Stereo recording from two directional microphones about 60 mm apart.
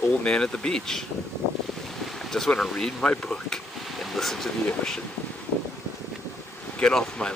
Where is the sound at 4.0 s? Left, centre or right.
Centre.